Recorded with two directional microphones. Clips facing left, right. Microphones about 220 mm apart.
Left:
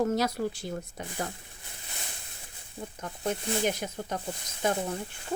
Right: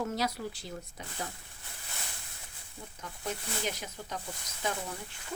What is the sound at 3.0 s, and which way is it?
Speech, 55° left (ahead or behind).